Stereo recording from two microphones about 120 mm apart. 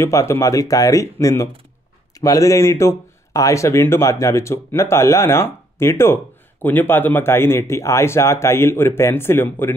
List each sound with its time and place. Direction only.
0.0 s speech: 25° left (ahead or behind)